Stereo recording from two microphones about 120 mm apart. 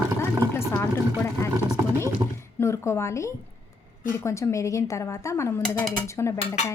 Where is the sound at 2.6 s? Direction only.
25° left (ahead or behind).